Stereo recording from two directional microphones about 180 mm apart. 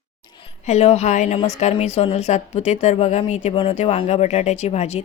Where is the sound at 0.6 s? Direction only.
35° left (ahead or behind).